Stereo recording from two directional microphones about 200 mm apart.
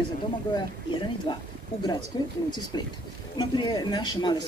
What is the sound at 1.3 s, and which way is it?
Speech, 25° left (ahead or behind).